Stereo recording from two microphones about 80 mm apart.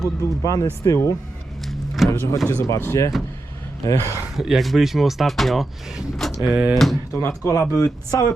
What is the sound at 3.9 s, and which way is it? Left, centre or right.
Speech, left.